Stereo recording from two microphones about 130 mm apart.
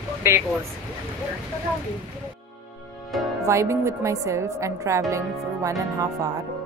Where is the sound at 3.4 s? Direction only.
20° right (ahead or behind).